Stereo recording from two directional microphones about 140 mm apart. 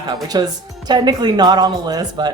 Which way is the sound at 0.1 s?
30° right (ahead or behind).